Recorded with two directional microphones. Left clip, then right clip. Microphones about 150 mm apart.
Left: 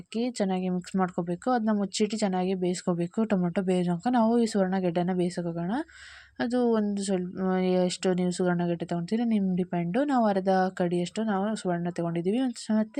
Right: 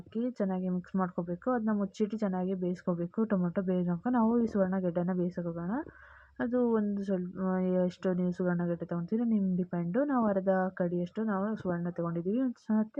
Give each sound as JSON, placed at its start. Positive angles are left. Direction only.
{"t": 0.3, "sound": "speech", "side_deg": 35}